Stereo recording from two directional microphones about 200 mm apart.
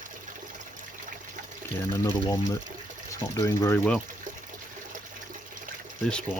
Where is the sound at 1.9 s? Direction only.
15° left (ahead or behind).